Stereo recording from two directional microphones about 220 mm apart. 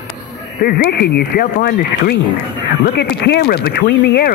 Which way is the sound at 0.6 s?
45° left (ahead or behind).